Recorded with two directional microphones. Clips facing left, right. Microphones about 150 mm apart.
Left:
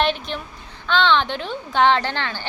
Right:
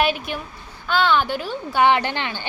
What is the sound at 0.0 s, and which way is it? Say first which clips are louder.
A woman's voice: even; 10° right (ahead or behind).